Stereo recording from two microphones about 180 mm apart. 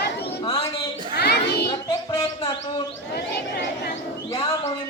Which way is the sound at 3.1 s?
75° left (ahead or behind).